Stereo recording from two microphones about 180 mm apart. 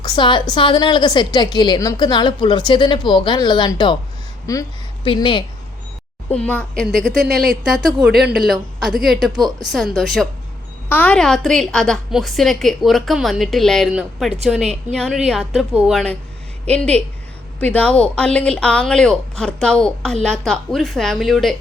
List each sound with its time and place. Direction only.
0.0 s a woman's voice: 25° left (ahead or behind)
6.3 s a woman's voice: 5° left (ahead or behind)
9.3 s a woman's voice: 20° right (ahead or behind)
9.7 s a woman's voice: centre (ahead or behind)